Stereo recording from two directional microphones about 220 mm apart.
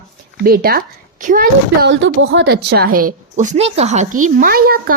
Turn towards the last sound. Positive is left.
turn(degrees=-45)  # may be behind; listen again after turning